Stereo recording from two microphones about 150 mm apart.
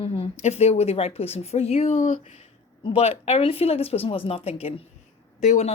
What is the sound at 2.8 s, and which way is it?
Speech, 40° left (ahead or behind).